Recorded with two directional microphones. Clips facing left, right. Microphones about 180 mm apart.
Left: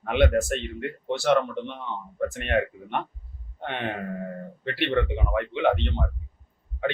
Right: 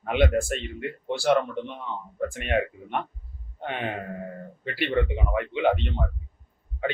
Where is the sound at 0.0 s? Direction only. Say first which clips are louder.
Left 1 dB; centre (ahead or behind).